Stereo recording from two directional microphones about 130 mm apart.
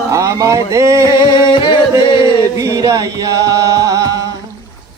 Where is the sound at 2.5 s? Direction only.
25° right (ahead or behind).